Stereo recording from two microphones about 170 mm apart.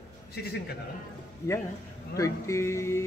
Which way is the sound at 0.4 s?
70° left (ahead or behind).